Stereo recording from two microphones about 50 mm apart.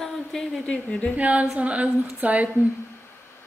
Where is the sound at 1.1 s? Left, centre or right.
Right.